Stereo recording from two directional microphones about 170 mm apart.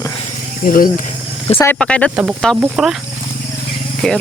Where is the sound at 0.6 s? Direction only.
55° left (ahead or behind).